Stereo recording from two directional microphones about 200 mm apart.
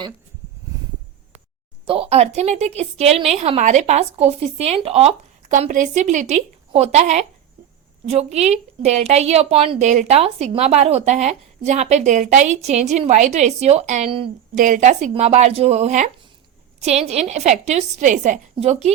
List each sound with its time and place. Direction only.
1.8 s a woman's voice: 30° right (ahead or behind)